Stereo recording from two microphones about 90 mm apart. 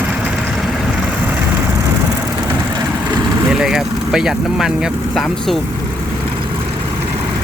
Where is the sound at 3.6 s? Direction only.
5° right (ahead or behind).